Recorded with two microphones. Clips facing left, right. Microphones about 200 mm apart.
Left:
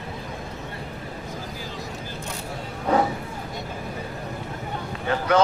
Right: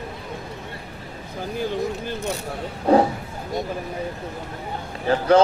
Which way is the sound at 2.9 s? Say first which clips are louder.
Right 5 dB; 30° right (ahead or behind).